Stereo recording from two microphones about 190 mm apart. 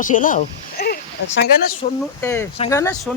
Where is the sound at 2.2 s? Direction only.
15° left (ahead or behind).